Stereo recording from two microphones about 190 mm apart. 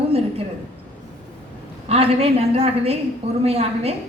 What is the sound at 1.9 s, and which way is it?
A woman's voice, 30° right (ahead or behind).